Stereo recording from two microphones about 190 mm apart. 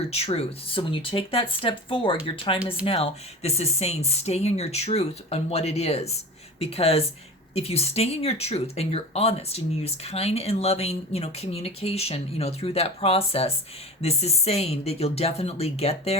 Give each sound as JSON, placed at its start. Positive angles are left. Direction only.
{"t": 0.1, "sound": "speech", "side_deg": 30}